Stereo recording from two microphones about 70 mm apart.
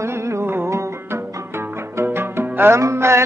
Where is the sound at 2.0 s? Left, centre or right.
Right.